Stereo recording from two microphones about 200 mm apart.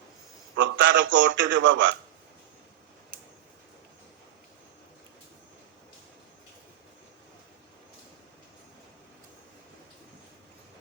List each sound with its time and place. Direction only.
0.5 s a man's voice: 70° right (ahead or behind)